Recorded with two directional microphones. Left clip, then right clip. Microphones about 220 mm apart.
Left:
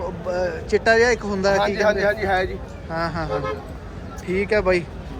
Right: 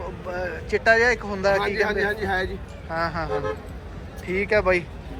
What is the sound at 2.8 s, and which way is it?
Speech, 10° left (ahead or behind).